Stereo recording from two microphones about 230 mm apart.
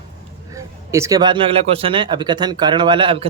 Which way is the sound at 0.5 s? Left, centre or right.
Centre.